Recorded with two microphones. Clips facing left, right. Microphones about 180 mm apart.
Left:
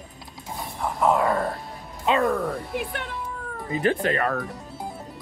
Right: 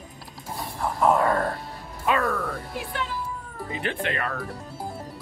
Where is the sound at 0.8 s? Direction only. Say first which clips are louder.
Even; 10° left (ahead or behind).